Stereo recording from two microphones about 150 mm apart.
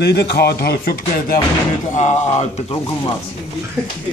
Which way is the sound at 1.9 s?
50° left (ahead or behind).